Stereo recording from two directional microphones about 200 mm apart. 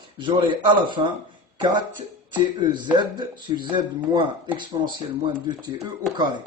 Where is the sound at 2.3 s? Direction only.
25° right (ahead or behind).